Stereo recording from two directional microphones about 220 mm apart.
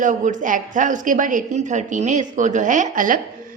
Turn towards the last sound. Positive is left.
turn(degrees=-40)  # may be behind; listen again after turning